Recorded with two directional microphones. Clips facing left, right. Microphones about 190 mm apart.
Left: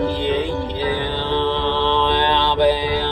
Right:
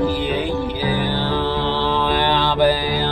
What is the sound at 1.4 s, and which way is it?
Mantra, 10° right (ahead or behind).